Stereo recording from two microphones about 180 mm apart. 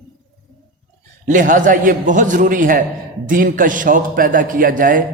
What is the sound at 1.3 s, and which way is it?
A woman's voice, 45° right (ahead or behind).